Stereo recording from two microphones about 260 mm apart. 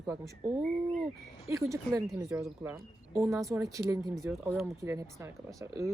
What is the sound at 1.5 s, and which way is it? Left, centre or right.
Speech, centre.